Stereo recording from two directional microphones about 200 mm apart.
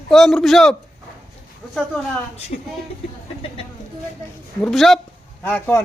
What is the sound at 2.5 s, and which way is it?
Speech, 45° left (ahead or behind).